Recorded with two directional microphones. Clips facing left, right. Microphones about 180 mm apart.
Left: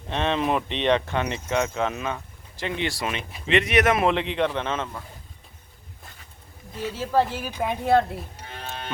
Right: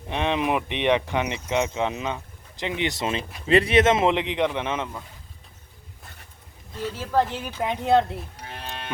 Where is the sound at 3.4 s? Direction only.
35° right (ahead or behind); by 5.0 s 15° right (ahead or behind).